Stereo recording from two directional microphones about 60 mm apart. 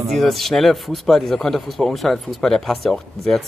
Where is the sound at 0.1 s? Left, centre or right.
Centre.